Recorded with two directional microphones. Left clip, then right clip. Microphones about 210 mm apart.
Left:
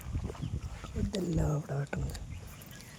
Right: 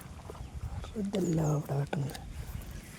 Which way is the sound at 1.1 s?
10° right (ahead or behind).